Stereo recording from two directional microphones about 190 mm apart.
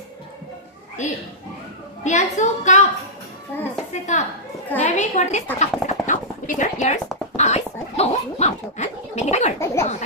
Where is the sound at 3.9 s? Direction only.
40° left (ahead or behind).